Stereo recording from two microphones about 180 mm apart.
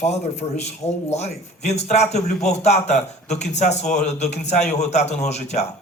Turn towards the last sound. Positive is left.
turn(degrees=40)  # may be behind; listen again after turning